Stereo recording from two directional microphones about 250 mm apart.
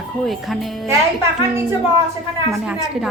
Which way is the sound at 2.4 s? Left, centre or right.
Centre.